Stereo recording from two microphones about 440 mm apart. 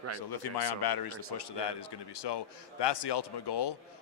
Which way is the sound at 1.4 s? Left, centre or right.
Left.